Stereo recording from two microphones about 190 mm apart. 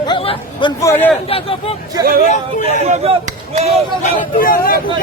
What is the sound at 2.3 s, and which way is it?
Speech, 40° left (ahead or behind).